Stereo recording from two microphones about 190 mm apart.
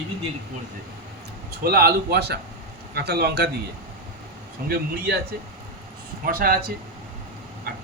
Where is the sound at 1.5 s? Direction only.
55° right (ahead or behind).